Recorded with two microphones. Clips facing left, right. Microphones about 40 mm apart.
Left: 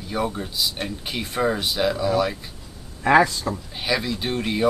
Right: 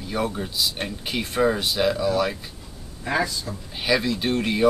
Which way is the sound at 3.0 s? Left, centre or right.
Left.